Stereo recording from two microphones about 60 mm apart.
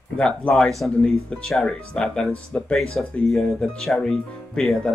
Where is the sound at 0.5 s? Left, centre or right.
Centre.